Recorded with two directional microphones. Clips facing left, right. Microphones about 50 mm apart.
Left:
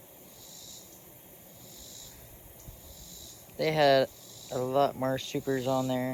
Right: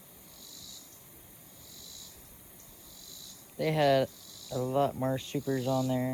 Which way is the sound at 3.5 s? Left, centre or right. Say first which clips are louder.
Left 2 dB; left.